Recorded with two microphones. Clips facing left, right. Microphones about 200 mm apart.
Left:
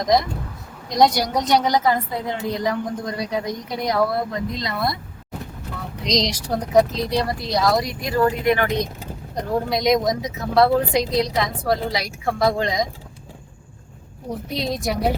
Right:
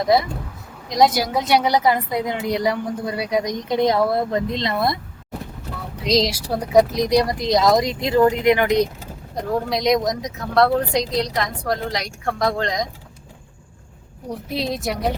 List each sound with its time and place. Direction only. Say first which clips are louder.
0.0 s a woman's voice: right 1 dB; 5° right (ahead or behind); by 4.9 s 25° right (ahead or behind)
6.0 s a woman's voice: right 3 dB; 5° right (ahead or behind)
9.3 s speech: even; centre (ahead or behind)
14.3 s speech: right 1 dB; centre (ahead or behind)